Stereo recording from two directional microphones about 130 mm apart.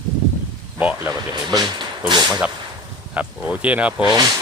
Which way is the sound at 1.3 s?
35° right (ahead or behind).